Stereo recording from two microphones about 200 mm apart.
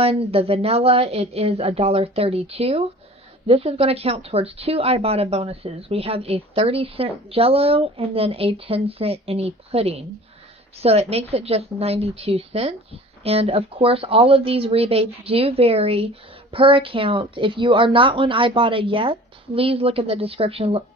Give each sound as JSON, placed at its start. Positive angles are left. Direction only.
{"t": 0.0, "sound": "a woman's voice", "side_deg": -30}